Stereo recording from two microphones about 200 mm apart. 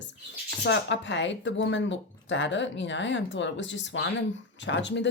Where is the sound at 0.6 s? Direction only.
65° left (ahead or behind).